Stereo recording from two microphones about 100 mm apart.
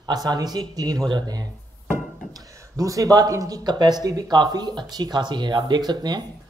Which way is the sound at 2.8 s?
35° right (ahead or behind).